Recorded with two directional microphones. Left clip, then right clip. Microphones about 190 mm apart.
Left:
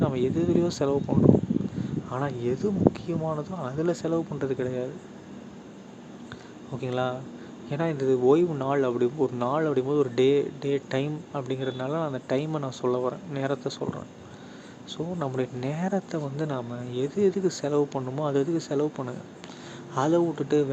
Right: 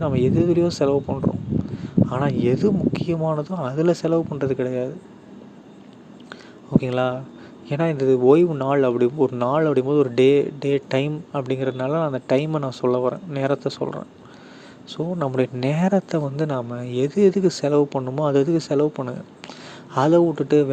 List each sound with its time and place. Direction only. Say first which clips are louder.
0.0 s speech: right 6 dB; 30° right (ahead or behind)
6.7 s speech: right 8 dB; 35° right (ahead or behind)